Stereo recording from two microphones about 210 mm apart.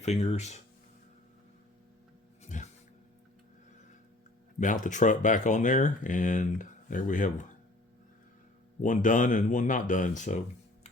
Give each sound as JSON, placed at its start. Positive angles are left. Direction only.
{"t": 0.0, "sound": "speech", "side_deg": 30}
{"t": 2.4, "sound": "a sound", "side_deg": 35}
{"t": 4.6, "sound": "speech", "side_deg": 35}
{"t": 8.8, "sound": "speech", "side_deg": 40}